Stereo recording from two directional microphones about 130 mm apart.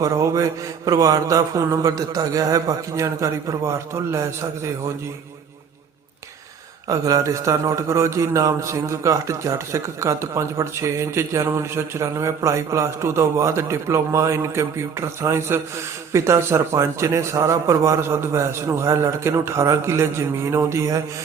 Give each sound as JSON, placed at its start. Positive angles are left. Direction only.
{"t": 0.0, "sound": "a man's voice", "side_deg": -25}
{"t": 6.8, "sound": "a man's voice", "side_deg": -25}